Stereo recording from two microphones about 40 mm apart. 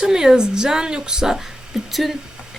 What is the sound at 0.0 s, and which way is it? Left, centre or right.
A woman's voice, centre.